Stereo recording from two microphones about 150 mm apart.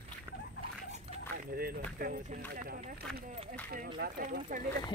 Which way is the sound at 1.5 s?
80° right.